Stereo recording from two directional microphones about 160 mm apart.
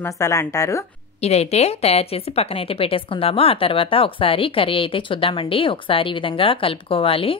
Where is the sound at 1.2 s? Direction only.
40° left (ahead or behind).